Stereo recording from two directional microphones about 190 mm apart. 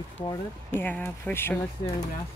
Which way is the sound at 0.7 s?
10° left (ahead or behind).